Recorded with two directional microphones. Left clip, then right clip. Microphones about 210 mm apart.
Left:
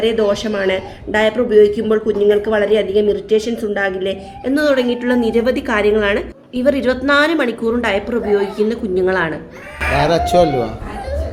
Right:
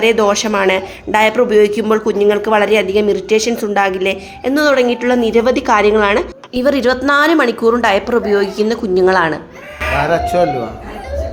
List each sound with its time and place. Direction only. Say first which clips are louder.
0.0 s speech: right 4 dB; 10° right (ahead or behind)
10.0 s speech: left 1 dB; 20° left (ahead or behind)